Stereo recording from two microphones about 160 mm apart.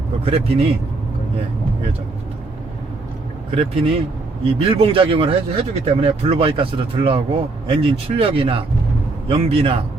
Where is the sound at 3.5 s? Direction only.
35° right (ahead or behind).